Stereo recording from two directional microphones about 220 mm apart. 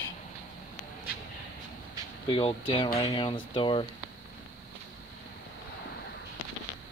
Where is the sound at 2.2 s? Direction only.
25° left (ahead or behind).